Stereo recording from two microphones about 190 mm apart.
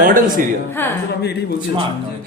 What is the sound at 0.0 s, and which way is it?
Speech, 45° right (ahead or behind).